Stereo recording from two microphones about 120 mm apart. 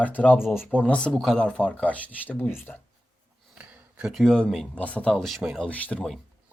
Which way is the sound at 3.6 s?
10° right (ahead or behind).